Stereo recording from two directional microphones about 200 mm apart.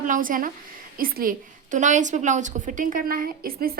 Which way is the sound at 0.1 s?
45° right (ahead or behind).